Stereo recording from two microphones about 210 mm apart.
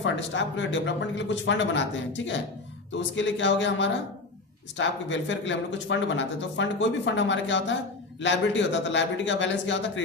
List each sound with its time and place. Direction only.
0.0 s speech: 60° left (ahead or behind)